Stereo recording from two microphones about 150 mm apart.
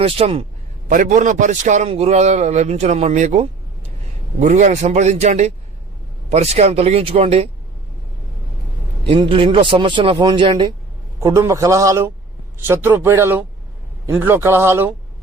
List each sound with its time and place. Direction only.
0.0 s speech: 40° right (ahead or behind)
0.9 s a man's voice: 60° right (ahead or behind); by 7.5 s 40° right (ahead or behind)
9.0 s speech: 35° right (ahead or behind)
11.2 s a man's voice: 20° right (ahead or behind)